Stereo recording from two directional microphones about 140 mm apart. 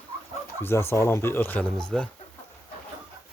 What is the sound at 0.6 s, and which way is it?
Speech, 15° left (ahead or behind).